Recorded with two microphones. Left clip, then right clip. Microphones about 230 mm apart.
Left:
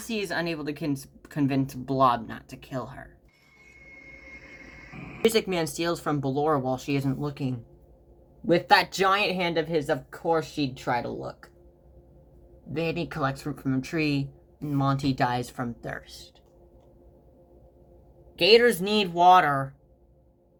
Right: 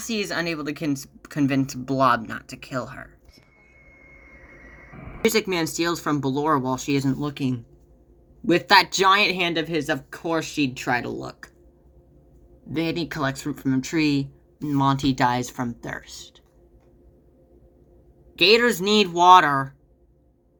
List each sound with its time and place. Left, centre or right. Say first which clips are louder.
0.0 s speech: right 3 dB; centre
4.3 s speech: left 2 dB; right
8.6 s speech: right 6 dB; right
12.7 s speech: right 3 dB; right
18.3 s speech: right 1 dB; right